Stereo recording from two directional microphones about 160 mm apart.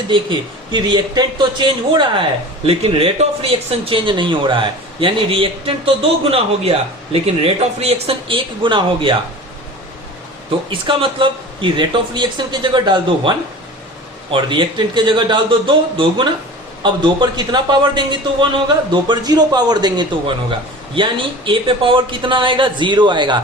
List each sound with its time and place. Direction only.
0.1 s speech: 30° right (ahead or behind)
10.7 s speech: 30° right (ahead or behind)